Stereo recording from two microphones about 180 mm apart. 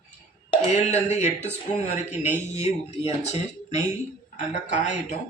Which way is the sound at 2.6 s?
35° left (ahead or behind).